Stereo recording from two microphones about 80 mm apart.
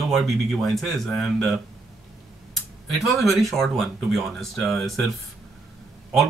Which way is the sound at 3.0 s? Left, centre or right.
Centre.